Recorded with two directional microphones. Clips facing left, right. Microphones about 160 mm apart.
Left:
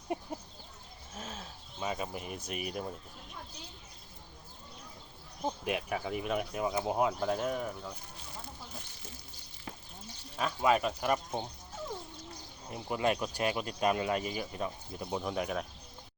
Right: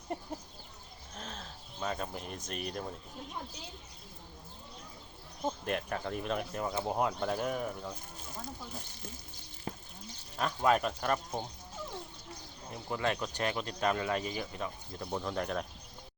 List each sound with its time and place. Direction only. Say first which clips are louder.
0.1 s speech: left 2 dB; 10° left (ahead or behind)
1.1 s a sound: left 1 dB; 5° left (ahead or behind)
2.5 s speech: left 1 dB; 5° left (ahead or behind)
5.5 s speech: left 1 dB; 5° left (ahead or behind)
9.7 s a sound: right 4 dB; 40° right (ahead or behind)
10.3 s speech: even; 5° left (ahead or behind)
12.7 s speech: left 3 dB; 20° left (ahead or behind)